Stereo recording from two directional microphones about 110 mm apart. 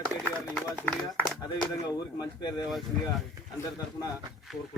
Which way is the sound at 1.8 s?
35° left (ahead or behind).